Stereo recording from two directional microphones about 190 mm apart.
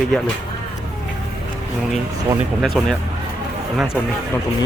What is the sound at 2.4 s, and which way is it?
A man's voice, centre (ahead or behind).